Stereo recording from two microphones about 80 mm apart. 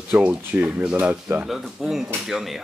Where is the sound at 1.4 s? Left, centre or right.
Centre.